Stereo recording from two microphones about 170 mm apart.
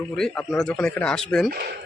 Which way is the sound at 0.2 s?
5° left (ahead or behind).